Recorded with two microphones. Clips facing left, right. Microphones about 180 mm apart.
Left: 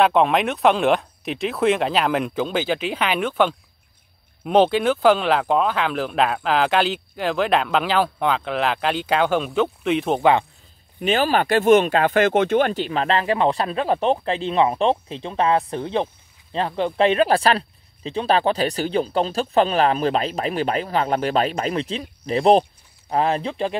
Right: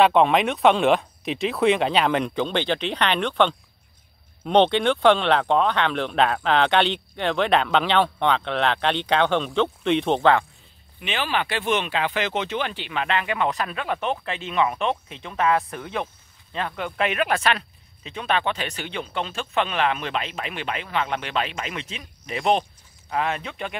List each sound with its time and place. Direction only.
0.0 s speech: centre (ahead or behind)
11.0 s speech: 40° left (ahead or behind)